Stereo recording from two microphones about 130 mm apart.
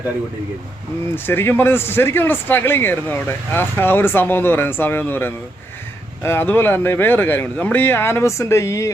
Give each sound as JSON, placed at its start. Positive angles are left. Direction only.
{"t": 1.1, "sound": "a man's voice", "side_deg": 15}